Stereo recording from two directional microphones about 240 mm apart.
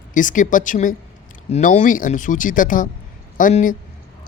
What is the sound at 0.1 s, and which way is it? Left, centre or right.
Speech, left.